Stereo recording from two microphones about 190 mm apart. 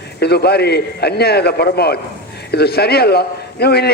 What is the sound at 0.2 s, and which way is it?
A man's voice, 60° left (ahead or behind).